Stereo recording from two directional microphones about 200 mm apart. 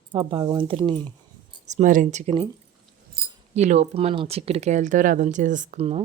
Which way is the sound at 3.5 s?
35° right (ahead or behind).